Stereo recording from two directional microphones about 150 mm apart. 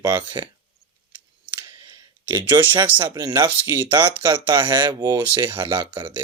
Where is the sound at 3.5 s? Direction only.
10° right (ahead or behind).